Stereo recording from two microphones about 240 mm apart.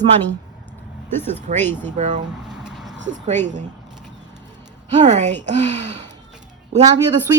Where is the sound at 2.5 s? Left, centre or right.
Centre.